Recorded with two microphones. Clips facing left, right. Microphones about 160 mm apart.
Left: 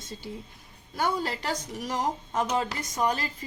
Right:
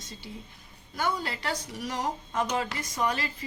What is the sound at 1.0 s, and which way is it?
A woman's voice, 40° left (ahead or behind).